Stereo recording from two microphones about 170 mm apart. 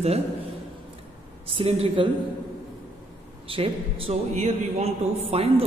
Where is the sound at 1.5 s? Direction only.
30° right (ahead or behind).